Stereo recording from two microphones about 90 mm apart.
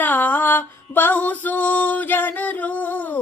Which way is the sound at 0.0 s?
20° left (ahead or behind).